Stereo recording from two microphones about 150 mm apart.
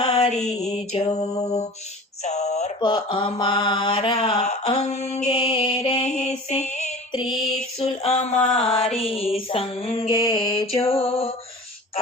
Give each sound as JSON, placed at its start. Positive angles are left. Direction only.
{"t": 0.0, "sound": "mantra", "side_deg": 45}
{"t": 2.2, "sound": "speech", "side_deg": 50}
{"t": 2.8, "sound": "mantra", "side_deg": 30}
{"t": 7.1, "sound": "female singing", "side_deg": 30}
{"t": 8.0, "sound": "a sound", "side_deg": 45}
{"t": 10.7, "sound": "music", "side_deg": 40}